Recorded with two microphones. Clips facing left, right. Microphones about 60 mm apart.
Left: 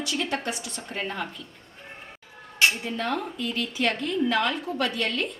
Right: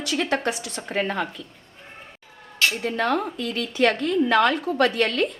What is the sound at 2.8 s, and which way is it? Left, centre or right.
A woman's voice, right.